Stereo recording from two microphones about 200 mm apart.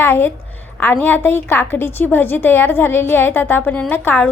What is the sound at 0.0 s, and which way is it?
A woman's voice, 10° left (ahead or behind).